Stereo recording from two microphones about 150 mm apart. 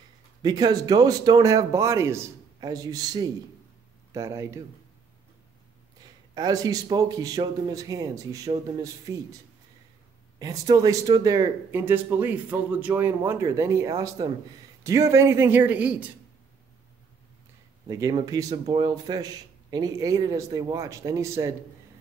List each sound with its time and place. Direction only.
0.4 s speech: 25° right (ahead or behind)
6.3 s speech: 25° right (ahead or behind)
10.4 s speech: 25° right (ahead or behind); by 16.1 s 10° right (ahead or behind)
17.8 s speech: 20° right (ahead or behind)